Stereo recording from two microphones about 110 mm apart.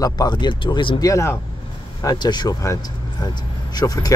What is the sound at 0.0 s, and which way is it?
Speech, 40° left (ahead or behind).